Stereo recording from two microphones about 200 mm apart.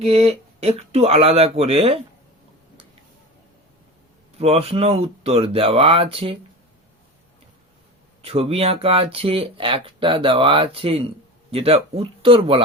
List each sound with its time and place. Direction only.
0.0 s speech: 30° right (ahead or behind)
4.4 s speech: 30° right (ahead or behind)
8.2 s speech: 30° right (ahead or behind)